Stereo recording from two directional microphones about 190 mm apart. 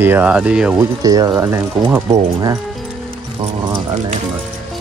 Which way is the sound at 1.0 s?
20° right (ahead or behind).